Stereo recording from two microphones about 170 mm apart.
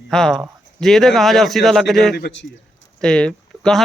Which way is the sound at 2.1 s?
80° left.